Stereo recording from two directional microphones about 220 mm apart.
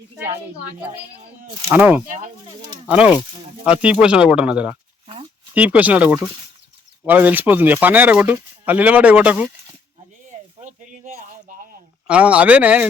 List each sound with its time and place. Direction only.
1.7 s speech: 5° right (ahead or behind)
2.0 s speech: 35° right (ahead or behind)
2.8 s speech: 5° right (ahead or behind)
10.6 s a sound: 35° right (ahead or behind)
12.0 s speech: 5° right (ahead or behind)